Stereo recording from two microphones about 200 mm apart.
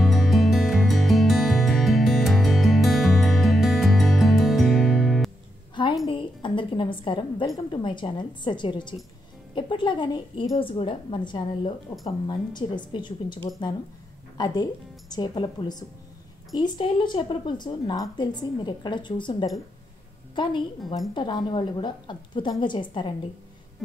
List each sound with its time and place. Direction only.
0.0 s music: centre (ahead or behind)
6.0 s a woman's voice: 25° left (ahead or behind)
21.1 s a woman's voice: 20° left (ahead or behind)